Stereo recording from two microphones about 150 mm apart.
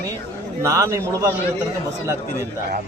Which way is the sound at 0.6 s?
20° right (ahead or behind).